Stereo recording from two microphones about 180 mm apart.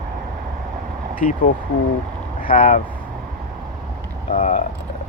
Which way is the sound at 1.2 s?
40° left (ahead or behind).